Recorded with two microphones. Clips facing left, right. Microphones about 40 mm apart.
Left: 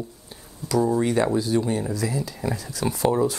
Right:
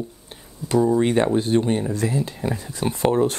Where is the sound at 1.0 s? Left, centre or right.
Right.